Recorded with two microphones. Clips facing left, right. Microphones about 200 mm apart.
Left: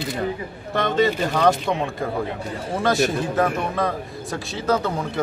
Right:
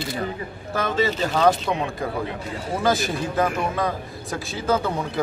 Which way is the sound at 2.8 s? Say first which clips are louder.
Left 3 dB; centre (ahead or behind).